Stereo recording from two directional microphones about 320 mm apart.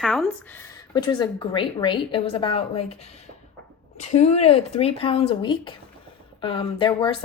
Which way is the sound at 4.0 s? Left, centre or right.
Left.